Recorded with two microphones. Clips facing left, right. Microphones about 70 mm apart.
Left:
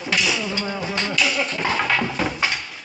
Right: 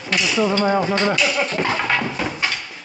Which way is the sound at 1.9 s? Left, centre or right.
Centre.